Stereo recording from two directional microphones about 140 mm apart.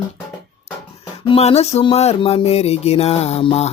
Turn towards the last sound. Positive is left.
turn(degrees=45)  # may be behind; listen again after turning